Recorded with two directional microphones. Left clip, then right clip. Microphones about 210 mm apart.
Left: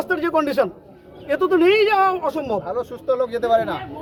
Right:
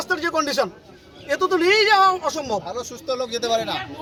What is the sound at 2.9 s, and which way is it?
Speech, 25° right (ahead or behind).